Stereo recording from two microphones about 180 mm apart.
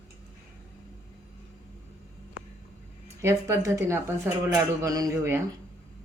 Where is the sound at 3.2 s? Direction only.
15° right (ahead or behind).